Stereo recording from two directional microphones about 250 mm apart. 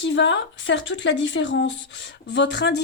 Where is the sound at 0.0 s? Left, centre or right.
Left.